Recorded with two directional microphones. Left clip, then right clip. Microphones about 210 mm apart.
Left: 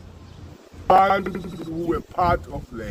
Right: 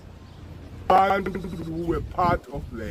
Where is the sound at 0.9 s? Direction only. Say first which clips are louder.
Left 3 dB; 25° left (ahead or behind).